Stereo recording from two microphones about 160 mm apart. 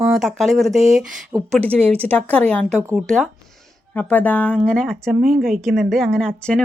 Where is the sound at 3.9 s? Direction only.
10° left (ahead or behind).